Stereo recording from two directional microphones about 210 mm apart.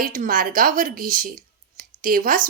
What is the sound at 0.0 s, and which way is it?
Speech, 40° right (ahead or behind).